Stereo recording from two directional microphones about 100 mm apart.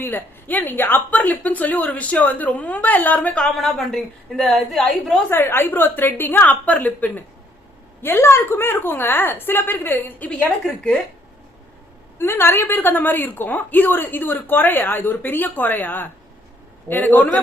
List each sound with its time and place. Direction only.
0.0 s speech: 20° left (ahead or behind)
3.3 s a woman's voice: 5° left (ahead or behind)
5.3 s a woman's voice: 25° left (ahead or behind)
12.2 s a woman's voice: 25° left (ahead or behind)